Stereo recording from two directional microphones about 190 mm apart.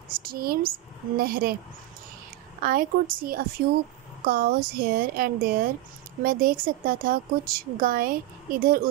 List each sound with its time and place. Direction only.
0.2 s a woman's voice: 50° right (ahead or behind)
2.6 s a woman's voice: 50° right (ahead or behind)